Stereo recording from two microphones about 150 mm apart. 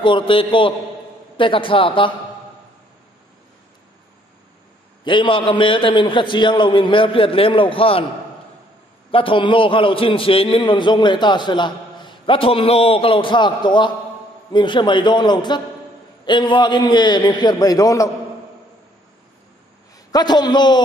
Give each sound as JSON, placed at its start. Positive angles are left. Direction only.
{"t": 0.0, "sound": "a man's voice", "side_deg": 35}
{"t": 5.0, "sound": "a man's voice", "side_deg": 35}
{"t": 9.1, "sound": "a man's voice", "side_deg": 35}
{"t": 20.1, "sound": "a man's voice", "side_deg": 25}